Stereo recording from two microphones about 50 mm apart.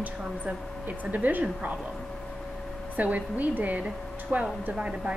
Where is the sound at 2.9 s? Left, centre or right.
Right.